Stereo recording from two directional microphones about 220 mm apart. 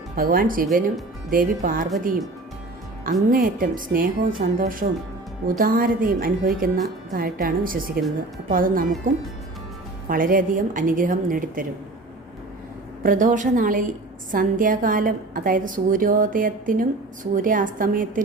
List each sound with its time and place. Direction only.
0.2 s a woman's voice: 40° right (ahead or behind)
3.2 s a woman's voice: 40° right (ahead or behind)
10.1 s a woman's voice: 40° right (ahead or behind)
13.0 s a woman's voice: 35° right (ahead or behind)